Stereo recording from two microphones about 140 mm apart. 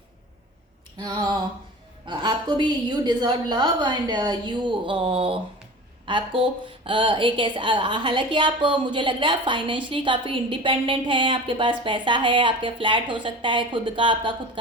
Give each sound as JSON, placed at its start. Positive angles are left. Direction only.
{"t": 0.9, "sound": "a woman's voice", "side_deg": -30}